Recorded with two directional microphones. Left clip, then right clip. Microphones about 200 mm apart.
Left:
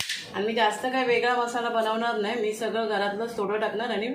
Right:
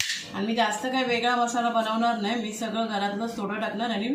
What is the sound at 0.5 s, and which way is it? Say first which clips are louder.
Speech: even; 40° left (ahead or behind).